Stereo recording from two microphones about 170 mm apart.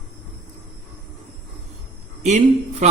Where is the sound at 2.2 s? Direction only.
45° right (ahead or behind).